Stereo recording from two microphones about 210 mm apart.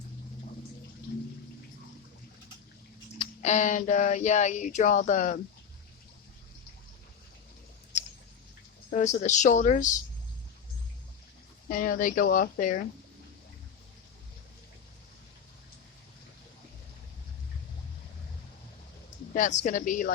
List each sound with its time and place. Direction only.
3.2 s speech: 35° left (ahead or behind)
8.9 s speech: 35° left (ahead or behind)
11.7 s speech: 40° left (ahead or behind)
19.3 s speech: 35° left (ahead or behind)